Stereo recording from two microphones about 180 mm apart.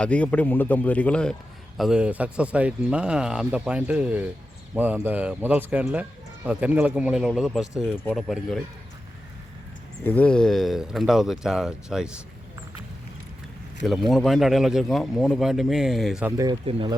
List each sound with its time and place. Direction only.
0.0 s a man's voice: 5° left (ahead or behind)
10.0 s speech: 10° left (ahead or behind)
14.1 s speech: centre (ahead or behind)
16.2 s speech: 20° right (ahead or behind)
16.6 s speech: 30° right (ahead or behind)